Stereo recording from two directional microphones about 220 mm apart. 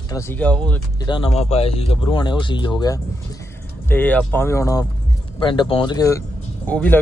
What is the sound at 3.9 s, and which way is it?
Speech, 10° left (ahead or behind).